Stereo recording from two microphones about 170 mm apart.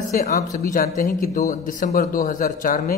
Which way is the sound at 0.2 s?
60° left (ahead or behind).